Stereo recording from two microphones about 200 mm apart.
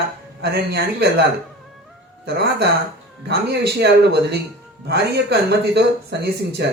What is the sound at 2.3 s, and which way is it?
Speech, 55° right (ahead or behind).